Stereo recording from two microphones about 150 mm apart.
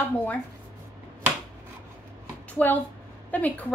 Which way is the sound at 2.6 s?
10° left (ahead or behind).